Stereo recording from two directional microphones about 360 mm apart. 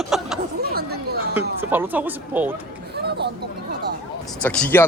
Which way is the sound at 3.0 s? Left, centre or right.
Right.